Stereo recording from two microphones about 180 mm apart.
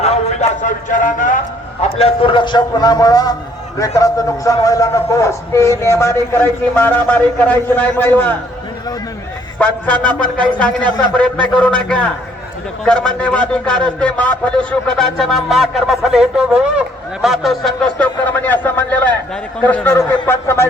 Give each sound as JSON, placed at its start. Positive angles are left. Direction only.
{"t": 0.0, "sound": "speech", "side_deg": 35}
{"t": 2.0, "sound": "a man's voice", "side_deg": 30}
{"t": 9.6, "sound": "a man's voice", "side_deg": 10}